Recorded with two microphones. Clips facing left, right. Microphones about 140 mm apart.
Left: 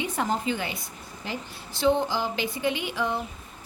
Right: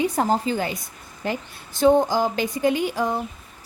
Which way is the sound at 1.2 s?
50° right (ahead or behind).